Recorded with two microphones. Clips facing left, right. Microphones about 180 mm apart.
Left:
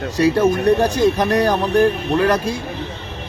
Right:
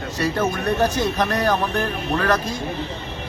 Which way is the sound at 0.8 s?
10° left (ahead or behind).